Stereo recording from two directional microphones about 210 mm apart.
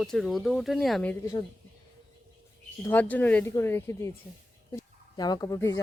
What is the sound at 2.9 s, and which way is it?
Speech, 10° left (ahead or behind).